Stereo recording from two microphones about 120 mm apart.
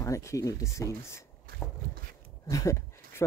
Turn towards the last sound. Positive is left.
turn(degrees=25)  # may be behind; listen again after turning